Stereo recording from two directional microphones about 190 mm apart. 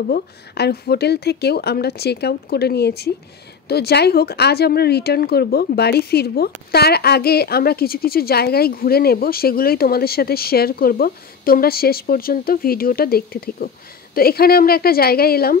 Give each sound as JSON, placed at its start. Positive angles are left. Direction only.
{"t": 0.1, "sound": "a woman's voice", "side_deg": 55}